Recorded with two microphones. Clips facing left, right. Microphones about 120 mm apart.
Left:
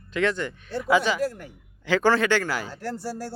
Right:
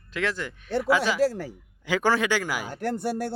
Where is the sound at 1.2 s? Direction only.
90° right.